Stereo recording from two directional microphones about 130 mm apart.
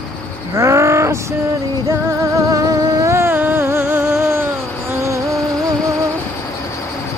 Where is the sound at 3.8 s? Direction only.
5° right (ahead or behind).